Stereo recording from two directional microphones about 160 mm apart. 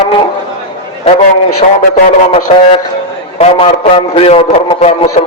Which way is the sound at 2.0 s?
40° left (ahead or behind).